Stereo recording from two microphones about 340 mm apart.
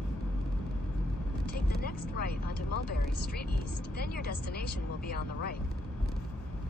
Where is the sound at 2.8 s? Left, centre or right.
Left.